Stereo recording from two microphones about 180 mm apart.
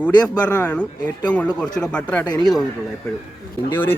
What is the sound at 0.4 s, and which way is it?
Speech, 10° left (ahead or behind).